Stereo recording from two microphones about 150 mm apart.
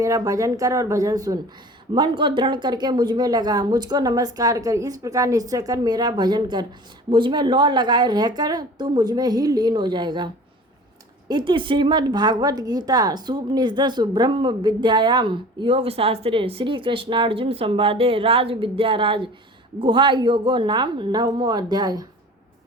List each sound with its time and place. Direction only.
0.0 s speech: 20° right (ahead or behind)